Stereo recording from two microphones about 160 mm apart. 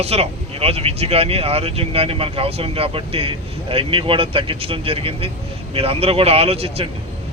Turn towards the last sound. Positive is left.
turn(degrees=-40)  # may be behind; listen again after turning